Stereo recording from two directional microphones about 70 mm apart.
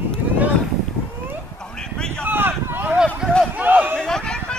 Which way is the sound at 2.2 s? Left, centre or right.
Right.